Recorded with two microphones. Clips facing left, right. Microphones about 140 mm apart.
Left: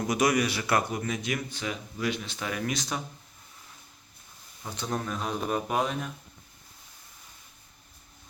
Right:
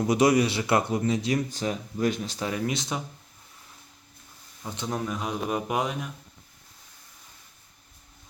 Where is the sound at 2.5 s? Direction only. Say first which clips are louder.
Right 1 dB; 25° right (ahead or behind).